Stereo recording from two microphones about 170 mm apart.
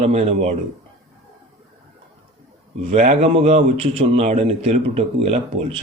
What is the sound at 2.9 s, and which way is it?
A man's voice, 45° right (ahead or behind).